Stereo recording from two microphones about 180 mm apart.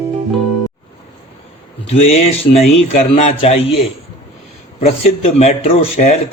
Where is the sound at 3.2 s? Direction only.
35° left (ahead or behind).